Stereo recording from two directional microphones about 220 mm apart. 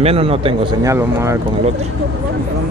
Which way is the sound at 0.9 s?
10° right (ahead or behind).